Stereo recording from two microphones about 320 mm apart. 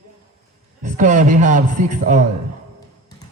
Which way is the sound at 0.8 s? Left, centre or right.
Right.